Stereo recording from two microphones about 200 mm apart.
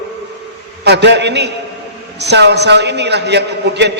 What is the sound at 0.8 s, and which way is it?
A man's voice, 55° right (ahead or behind).